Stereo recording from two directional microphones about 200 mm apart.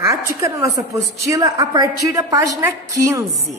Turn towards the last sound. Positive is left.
turn(degrees=-15)  # may be behind; listen again after turning